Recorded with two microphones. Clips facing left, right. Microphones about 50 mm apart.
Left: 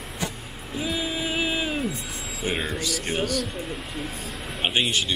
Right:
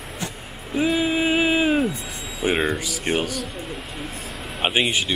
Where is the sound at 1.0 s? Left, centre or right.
Right.